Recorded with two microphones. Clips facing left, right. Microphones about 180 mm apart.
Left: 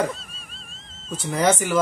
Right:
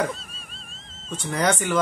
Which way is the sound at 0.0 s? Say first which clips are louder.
Left 1 dB; centre (ahead or behind).